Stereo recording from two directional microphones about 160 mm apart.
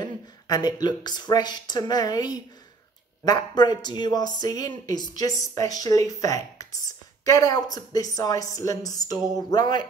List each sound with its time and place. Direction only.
0.0 s speech: 25° left (ahead or behind)